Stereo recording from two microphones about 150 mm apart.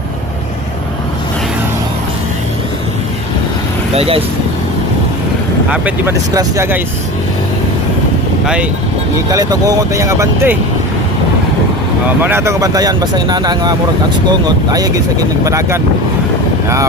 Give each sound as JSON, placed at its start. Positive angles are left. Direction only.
{"t": 3.9, "sound": "speech", "side_deg": -40}
{"t": 5.7, "sound": "speech", "side_deg": -10}
{"t": 9.3, "sound": "speech", "side_deg": -25}
{"t": 12.2, "sound": "speech", "side_deg": -15}